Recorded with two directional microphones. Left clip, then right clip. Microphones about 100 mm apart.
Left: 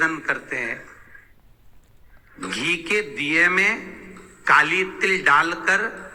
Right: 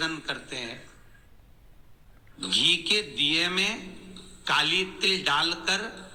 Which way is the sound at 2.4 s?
20° left (ahead or behind).